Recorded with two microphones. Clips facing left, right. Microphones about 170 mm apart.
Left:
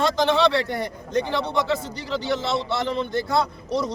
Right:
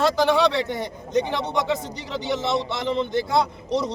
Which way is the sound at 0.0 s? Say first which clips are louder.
Right 1 dB; 10° right (ahead or behind).